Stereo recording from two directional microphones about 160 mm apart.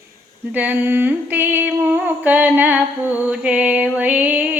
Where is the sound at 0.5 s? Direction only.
10° right (ahead or behind).